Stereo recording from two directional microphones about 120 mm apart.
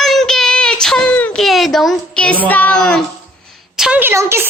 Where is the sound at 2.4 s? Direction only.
15° left (ahead or behind).